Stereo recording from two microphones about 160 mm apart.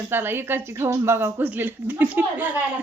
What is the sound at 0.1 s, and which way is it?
Speech, 15° right (ahead or behind).